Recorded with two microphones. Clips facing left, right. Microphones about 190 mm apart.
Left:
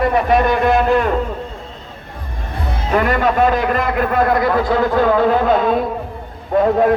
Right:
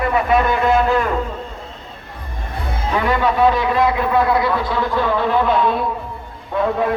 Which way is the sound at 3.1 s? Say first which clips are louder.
Right 2 dB; 50° left (ahead or behind).